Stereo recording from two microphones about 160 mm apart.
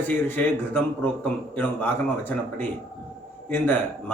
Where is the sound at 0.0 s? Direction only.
10° left (ahead or behind).